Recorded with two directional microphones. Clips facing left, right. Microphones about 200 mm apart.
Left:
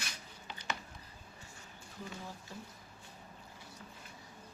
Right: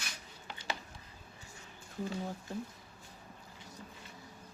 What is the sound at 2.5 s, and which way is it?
Speech, 50° right (ahead or behind).